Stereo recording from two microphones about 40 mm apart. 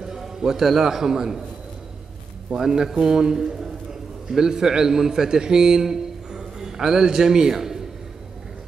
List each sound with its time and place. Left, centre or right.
0.0 s a man's voice: centre
2.5 s a man's voice: centre